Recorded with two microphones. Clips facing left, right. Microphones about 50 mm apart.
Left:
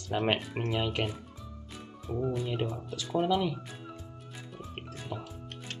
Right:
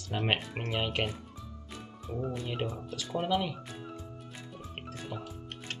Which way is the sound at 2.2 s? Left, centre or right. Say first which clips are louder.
Left 3 dB; centre.